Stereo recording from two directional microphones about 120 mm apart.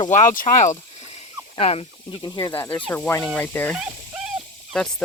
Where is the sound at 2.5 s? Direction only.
15° left (ahead or behind).